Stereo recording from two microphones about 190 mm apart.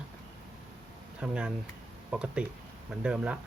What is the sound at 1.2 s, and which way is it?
Speech, 5° right (ahead or behind).